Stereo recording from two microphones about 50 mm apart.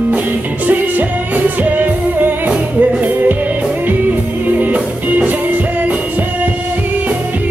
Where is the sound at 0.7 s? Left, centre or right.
Right.